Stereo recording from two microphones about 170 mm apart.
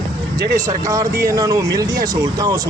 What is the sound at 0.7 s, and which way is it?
Speech, 20° right (ahead or behind).